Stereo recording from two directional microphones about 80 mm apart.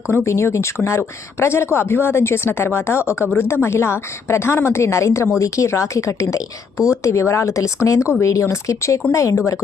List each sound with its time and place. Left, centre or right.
0.1 s a woman's voice: left